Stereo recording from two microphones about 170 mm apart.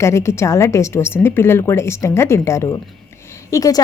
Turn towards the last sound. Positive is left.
turn(degrees=20)  # may be behind; listen again after turning